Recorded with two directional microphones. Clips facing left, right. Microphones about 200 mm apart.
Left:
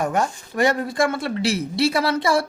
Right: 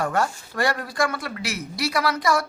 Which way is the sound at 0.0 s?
20° left (ahead or behind).